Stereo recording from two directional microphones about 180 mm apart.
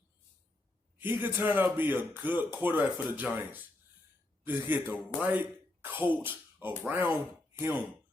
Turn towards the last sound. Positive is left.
turn(degrees=-10)  # may be behind; listen again after turning